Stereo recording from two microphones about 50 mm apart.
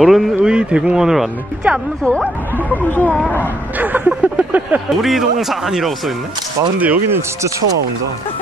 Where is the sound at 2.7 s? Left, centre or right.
Left.